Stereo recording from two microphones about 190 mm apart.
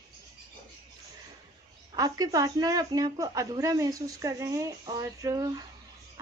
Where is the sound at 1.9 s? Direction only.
20° right (ahead or behind).